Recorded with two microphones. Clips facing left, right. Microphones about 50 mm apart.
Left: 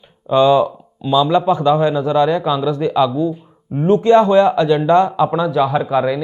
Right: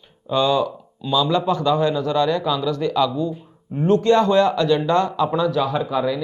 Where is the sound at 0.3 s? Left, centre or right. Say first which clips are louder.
Left 7 dB; left.